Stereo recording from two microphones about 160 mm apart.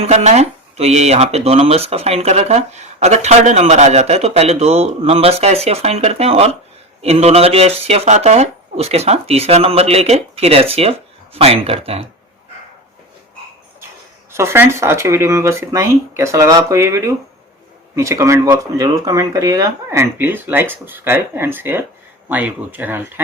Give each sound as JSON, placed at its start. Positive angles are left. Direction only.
{"t": 0.0, "sound": "speech", "side_deg": -45}
{"t": 14.3, "sound": "speech", "side_deg": -15}